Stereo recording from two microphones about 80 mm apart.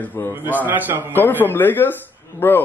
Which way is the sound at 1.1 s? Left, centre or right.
Left.